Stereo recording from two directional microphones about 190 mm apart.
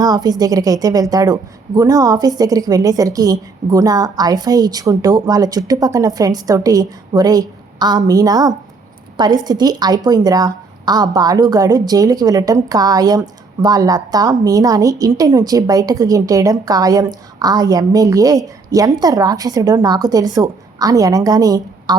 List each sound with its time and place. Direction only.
0.0 s a woman's voice: 20° right (ahead or behind)